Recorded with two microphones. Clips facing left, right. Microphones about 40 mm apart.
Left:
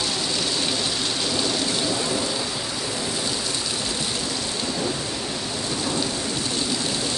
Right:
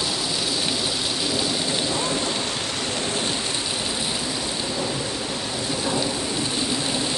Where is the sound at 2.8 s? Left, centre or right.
Right.